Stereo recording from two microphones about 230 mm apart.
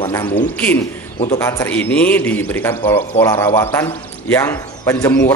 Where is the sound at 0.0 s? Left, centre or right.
Left.